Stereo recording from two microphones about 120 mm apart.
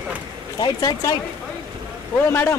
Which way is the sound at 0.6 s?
30° left (ahead or behind).